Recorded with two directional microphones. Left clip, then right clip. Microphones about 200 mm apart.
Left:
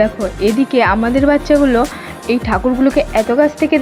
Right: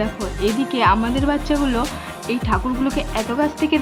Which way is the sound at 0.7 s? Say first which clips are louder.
Left 2 dB; 25° left (ahead or behind).